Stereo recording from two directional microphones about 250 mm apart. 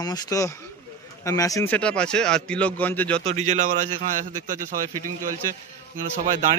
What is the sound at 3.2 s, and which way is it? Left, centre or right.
A man's voice, right.